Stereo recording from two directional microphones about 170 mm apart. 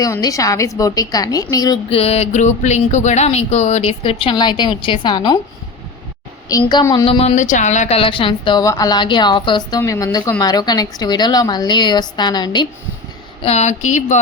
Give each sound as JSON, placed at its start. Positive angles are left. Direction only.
{"t": 0.0, "sound": "a woman's voice", "side_deg": 20}
{"t": 1.9, "sound": "speech", "side_deg": 35}
{"t": 6.5, "sound": "a woman's voice", "side_deg": 25}
{"t": 13.4, "sound": "speech", "side_deg": 40}